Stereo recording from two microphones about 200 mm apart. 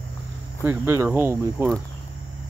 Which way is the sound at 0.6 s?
15° right (ahead or behind).